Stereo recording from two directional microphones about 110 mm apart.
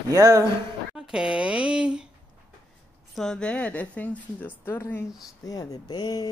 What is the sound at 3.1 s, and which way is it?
Speech, 5° left (ahead or behind).